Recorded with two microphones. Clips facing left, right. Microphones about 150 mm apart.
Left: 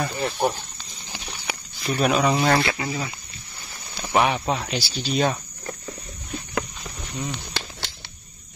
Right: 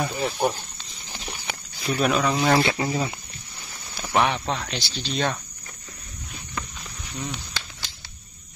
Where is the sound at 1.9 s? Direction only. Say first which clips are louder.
Left 1 dB; centre (ahead or behind).